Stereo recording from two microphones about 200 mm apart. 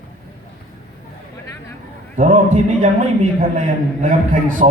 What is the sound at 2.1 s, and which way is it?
A man's voice, 40° right (ahead or behind).